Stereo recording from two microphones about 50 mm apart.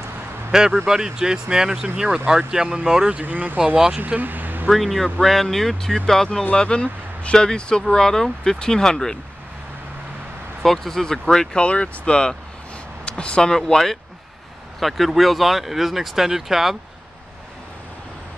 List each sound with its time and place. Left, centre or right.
0.5 s speech: centre
3.3 s speech: right
3.6 s speech: centre
4.0 s speech: right
4.6 s speech: centre
10.6 s speech: centre